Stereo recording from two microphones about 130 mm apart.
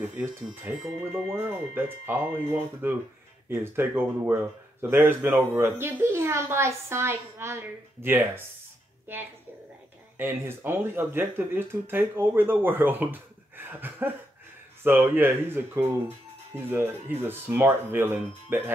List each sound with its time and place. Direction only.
0.0 s speech: 15° right (ahead or behind)